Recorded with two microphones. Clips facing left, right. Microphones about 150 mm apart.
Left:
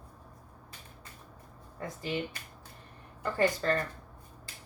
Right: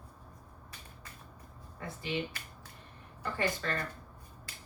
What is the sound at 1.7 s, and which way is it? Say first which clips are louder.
Speech: left 4 dB; 40° left (ahead or behind).